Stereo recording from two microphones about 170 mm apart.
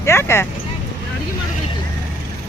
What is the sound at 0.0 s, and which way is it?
Speech, 15° left (ahead or behind).